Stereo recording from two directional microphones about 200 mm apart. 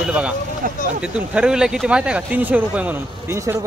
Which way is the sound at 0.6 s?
45° right (ahead or behind).